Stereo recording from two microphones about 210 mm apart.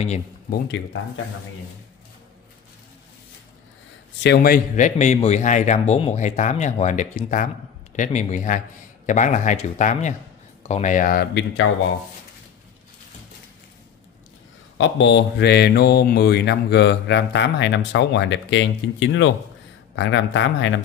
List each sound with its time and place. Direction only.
4.2 s speech: 50° left (ahead or behind)
14.8 s speech: 60° left (ahead or behind)